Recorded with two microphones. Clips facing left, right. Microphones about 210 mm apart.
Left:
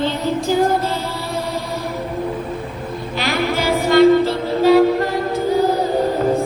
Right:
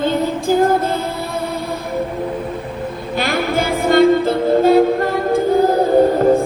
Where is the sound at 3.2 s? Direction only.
50° right (ahead or behind).